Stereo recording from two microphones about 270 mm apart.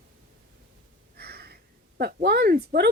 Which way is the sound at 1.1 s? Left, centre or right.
Right.